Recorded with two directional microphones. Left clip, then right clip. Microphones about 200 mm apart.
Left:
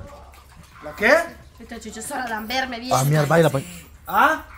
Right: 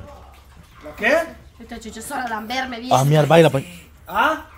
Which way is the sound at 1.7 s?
Centre (ahead or behind).